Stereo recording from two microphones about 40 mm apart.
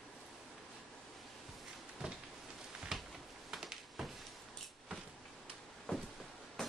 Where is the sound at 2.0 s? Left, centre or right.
Right.